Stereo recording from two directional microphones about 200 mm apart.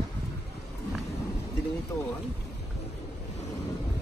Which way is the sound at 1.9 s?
15° left (ahead or behind).